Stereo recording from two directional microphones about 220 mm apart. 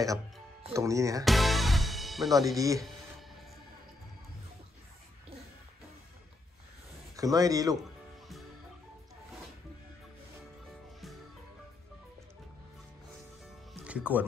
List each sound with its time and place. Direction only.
0.7 s a man's voice: 15° right (ahead or behind)
1.2 s music: centre (ahead or behind)
2.5 s a man's voice: 15° right (ahead or behind)
7.2 s a man's voice: 15° right (ahead or behind)
13.8 s speech: 5° right (ahead or behind)